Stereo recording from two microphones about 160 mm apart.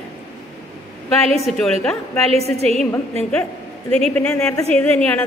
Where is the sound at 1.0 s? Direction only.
Centre (ahead or behind).